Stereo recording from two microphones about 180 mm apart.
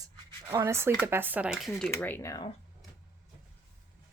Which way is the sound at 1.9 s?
10° left (ahead or behind).